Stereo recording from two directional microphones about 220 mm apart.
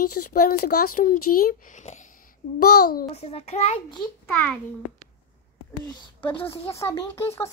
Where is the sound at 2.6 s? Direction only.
45° left (ahead or behind).